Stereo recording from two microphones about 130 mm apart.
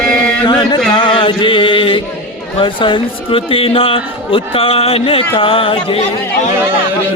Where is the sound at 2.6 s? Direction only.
40° left (ahead or behind).